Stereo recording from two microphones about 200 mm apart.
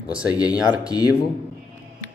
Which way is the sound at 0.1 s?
5° right (ahead or behind).